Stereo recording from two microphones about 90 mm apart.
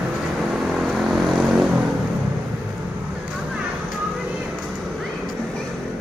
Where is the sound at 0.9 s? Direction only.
Centre (ahead or behind).